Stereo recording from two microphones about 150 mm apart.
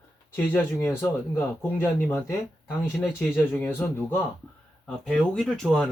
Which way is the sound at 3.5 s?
15° left (ahead or behind).